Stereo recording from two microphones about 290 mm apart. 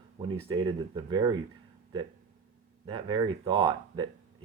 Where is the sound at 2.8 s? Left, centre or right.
Centre.